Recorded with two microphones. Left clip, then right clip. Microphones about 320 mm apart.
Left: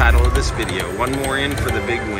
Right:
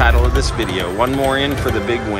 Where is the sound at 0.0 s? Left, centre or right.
Centre.